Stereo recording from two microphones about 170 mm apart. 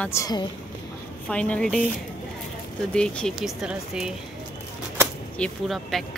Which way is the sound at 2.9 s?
5° left (ahead or behind).